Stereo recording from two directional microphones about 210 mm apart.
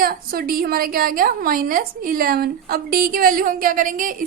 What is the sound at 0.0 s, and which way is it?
A woman's voice, 45° right (ahead or behind).